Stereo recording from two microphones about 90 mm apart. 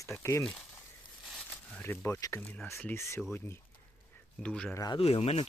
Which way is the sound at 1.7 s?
25° left (ahead or behind).